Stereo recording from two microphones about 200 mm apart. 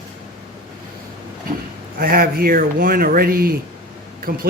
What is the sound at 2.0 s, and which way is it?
Speech, 45° right (ahead or behind).